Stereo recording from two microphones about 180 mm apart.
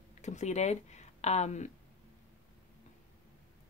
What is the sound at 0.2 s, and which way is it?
A woman's voice, 40° left (ahead or behind).